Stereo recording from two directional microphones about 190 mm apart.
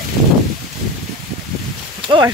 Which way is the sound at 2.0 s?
25° right (ahead or behind).